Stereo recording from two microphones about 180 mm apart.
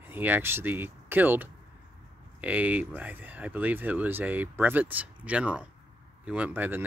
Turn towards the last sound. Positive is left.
turn(degrees=-10)  # may be behind; listen again after turning